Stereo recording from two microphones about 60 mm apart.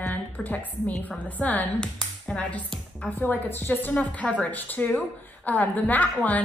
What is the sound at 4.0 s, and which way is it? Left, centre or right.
A woman's voice, left.